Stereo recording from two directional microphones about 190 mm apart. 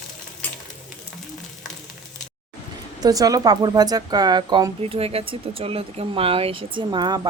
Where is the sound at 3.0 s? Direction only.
20° right (ahead or behind).